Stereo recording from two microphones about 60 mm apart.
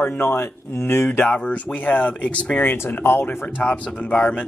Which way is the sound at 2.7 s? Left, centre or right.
Left.